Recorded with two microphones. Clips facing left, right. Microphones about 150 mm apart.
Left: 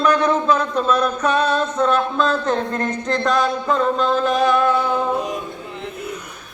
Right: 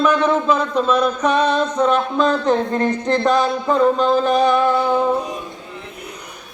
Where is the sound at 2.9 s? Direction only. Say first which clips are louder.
Right 4 dB; centre (ahead or behind).